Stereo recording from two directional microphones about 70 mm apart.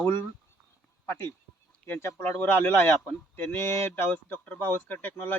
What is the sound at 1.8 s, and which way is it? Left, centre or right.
Speech, left.